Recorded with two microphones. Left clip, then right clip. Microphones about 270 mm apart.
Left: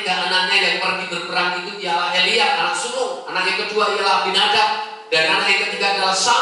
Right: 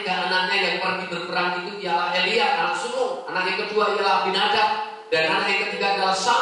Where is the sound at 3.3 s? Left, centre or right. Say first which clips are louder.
Left 4 dB; centre.